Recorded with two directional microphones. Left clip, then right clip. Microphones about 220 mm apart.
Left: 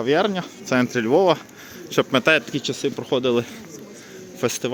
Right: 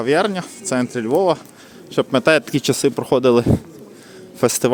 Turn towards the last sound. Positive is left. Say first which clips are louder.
# right 7 dB
turn(degrees=-30)  # may be behind; listen again after turning